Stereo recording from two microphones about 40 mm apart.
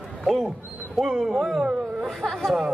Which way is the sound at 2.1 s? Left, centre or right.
Centre.